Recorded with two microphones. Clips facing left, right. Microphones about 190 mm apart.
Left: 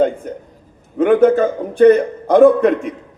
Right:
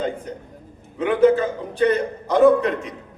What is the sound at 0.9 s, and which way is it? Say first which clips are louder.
A man's voice: left 5 dB; 50° left (ahead or behind).